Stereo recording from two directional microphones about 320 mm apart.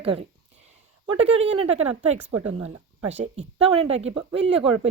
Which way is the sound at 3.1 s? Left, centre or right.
Right.